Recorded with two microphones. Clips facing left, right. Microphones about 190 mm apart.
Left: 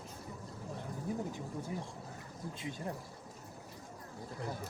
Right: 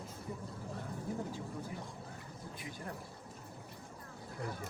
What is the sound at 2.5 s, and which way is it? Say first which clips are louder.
Speech: left 5 dB; 25° left (ahead or behind).